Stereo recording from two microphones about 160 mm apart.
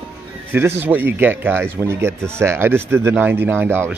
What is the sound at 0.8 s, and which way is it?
Speech, 10° right (ahead or behind).